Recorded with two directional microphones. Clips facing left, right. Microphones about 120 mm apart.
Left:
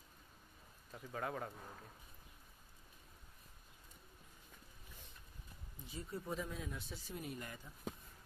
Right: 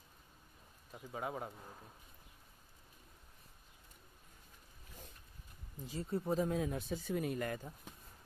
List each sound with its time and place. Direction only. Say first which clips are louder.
0.9 s speech: right 1 dB; 15° right (ahead or behind)
5.9 s speech: right 8 dB; 30° right (ahead or behind)
6.6 s speech: right 9 dB; 55° right (ahead or behind)
7.2 s speech: right 8 dB; 65° right (ahead or behind)